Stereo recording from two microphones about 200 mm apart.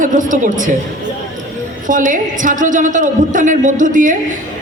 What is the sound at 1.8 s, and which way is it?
A woman's voice, 40° right (ahead or behind).